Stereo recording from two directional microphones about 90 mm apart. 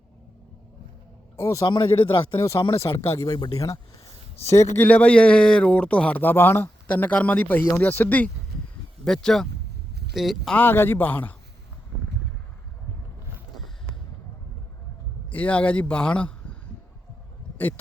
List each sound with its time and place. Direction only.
1.4 s a man's voice: 35° left (ahead or behind)
1.6 s speech: 60° left (ahead or behind)
2.6 s a man's voice: 30° left (ahead or behind)
3.2 s speech: 50° left (ahead or behind)
4.5 s a man's voice: 30° left (ahead or behind)
4.9 s a man's voice: 15° left (ahead or behind)
9.0 s speech: 5° left (ahead or behind)
10.5 s a man's voice: 25° left (ahead or behind)
15.3 s a man's voice: 15° left (ahead or behind)